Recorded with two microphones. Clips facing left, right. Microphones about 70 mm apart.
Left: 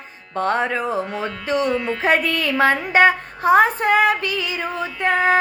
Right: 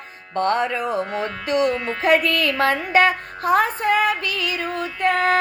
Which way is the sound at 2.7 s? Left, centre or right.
Left.